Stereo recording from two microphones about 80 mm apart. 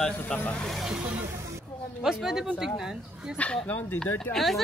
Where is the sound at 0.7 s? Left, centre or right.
Centre.